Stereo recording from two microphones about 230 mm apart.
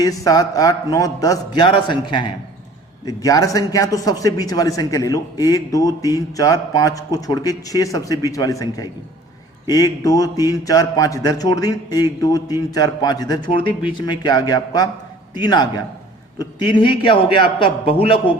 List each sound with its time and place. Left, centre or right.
0.0 s a man's voice: centre